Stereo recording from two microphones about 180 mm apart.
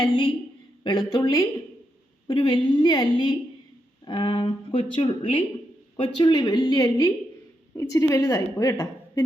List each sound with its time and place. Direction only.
0.0 s a woman's voice: 25° left (ahead or behind)